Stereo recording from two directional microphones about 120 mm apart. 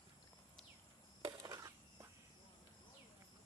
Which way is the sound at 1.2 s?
35° right (ahead or behind).